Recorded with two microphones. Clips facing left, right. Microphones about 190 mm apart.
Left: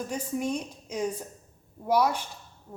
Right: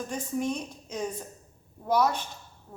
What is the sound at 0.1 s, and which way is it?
Speech, 10° left (ahead or behind).